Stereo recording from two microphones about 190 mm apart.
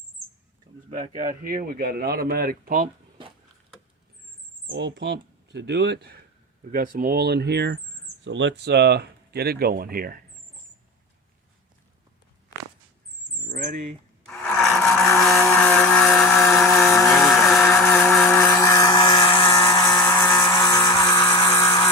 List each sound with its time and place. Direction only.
0.9 s speech: 40° right (ahead or behind)
4.6 s speech: 70° right (ahead or behind)
6.7 s speech: 45° right (ahead or behind)
13.6 s speech: 45° right (ahead or behind)
14.3 s a sound: 5° left (ahead or behind)
15.2 s vehicle: centre (ahead or behind)
16.6 s chainsaw: 15° left (ahead or behind)
17.1 s vehicle: centre (ahead or behind); by 19.9 s 20° left (ahead or behind)
20.0 s a sound: 15° left (ahead or behind)